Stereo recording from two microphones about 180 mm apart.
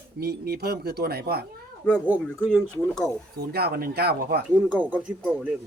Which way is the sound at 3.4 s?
60° right (ahead or behind).